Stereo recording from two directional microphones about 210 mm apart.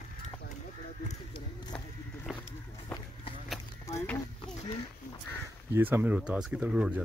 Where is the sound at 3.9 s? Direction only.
15° left (ahead or behind).